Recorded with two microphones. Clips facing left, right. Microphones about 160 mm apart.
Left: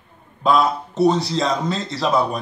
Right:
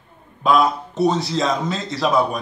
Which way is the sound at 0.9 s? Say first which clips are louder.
Left 2 dB; centre (ahead or behind).